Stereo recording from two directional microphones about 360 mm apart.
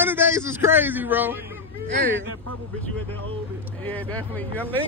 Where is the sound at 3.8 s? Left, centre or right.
Centre.